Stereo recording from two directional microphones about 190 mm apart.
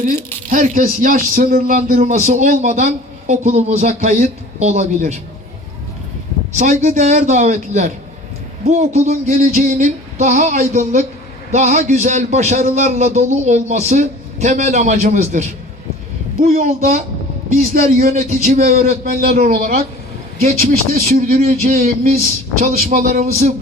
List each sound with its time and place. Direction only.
0.5 s a man's voice: 45° right (ahead or behind)
6.5 s a man's voice: 35° right (ahead or behind)
18.8 s a man's voice: 45° right (ahead or behind)